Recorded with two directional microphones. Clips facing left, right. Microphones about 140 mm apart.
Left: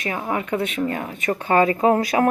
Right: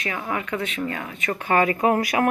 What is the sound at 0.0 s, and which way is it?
Speech, 30° left (ahead or behind).